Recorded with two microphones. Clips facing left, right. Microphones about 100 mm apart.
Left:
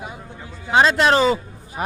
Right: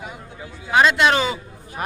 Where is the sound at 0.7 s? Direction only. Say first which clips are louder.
Left 1 dB; 35° left (ahead or behind).